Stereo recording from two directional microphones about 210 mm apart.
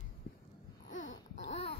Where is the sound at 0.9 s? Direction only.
35° left (ahead or behind).